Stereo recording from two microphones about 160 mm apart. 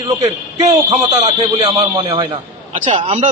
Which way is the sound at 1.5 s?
35° right (ahead or behind).